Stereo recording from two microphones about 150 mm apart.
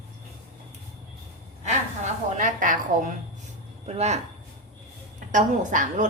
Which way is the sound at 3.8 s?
45° right (ahead or behind).